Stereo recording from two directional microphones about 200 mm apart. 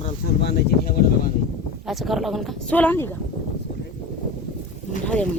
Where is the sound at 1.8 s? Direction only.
Centre (ahead or behind).